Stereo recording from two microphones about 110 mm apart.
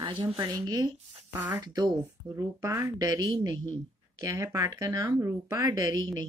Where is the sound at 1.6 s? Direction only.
40° right (ahead or behind).